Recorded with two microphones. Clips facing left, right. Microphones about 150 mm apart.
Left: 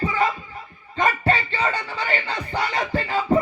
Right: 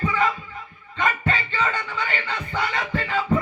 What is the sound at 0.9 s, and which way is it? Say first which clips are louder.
Music: left 3 dB; 35° left (ahead or behind).